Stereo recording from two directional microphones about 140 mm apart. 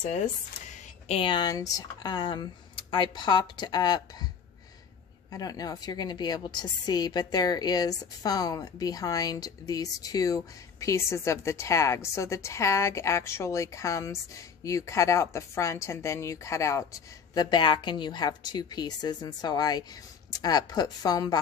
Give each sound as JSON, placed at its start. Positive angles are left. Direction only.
{"t": 0.0, "sound": "speech", "side_deg": 60}
{"t": 5.3, "sound": "a woman's voice", "side_deg": 25}